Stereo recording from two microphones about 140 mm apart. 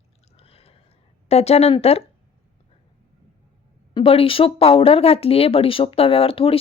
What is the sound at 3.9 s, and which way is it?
Speech, 40° left (ahead or behind).